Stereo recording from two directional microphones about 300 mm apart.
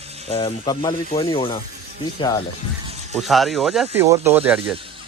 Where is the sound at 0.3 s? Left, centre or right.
Centre.